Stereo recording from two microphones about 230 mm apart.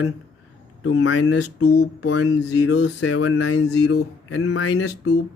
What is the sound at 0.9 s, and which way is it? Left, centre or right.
Speech, left.